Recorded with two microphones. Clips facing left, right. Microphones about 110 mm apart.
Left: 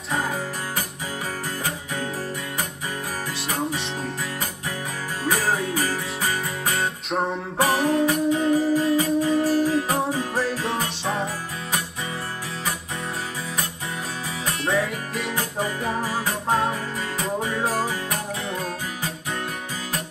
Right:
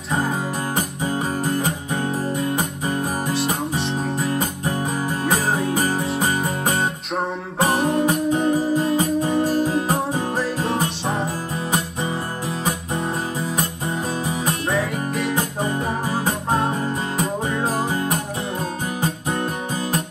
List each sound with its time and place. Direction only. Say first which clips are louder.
3.6 s music: right 3 dB; centre (ahead or behind)
4.0 s music: right 7 dB; 40° right (ahead or behind)
5.2 s music: even; 20° right (ahead or behind)
7.1 s music: even; centre (ahead or behind)
7.7 s music: right 1 dB; 30° right (ahead or behind)
10.6 s music: right 4 dB; 30° right (ahead or behind)
14.7 s music: left 2 dB; centre (ahead or behind)
15.3 s music: right 4 dB; 25° right (ahead or behind)